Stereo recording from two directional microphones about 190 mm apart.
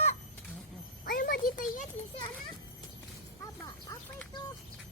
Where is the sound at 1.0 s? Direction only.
50° left (ahead or behind).